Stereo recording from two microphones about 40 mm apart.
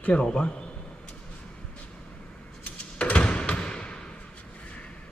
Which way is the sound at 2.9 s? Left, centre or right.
Left.